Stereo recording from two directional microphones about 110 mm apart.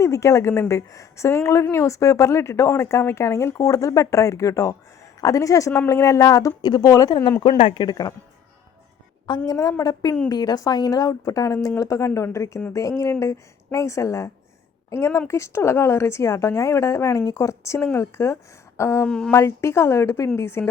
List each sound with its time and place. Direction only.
0.0 s a woman's voice: 25° left (ahead or behind)
7.4 s speech: 60° left (ahead or behind); by 8.1 s 40° left (ahead or behind)
9.5 s a woman's voice: 30° left (ahead or behind)
19.0 s speech: 5° left (ahead or behind)
19.3 s speech: 25° left (ahead or behind)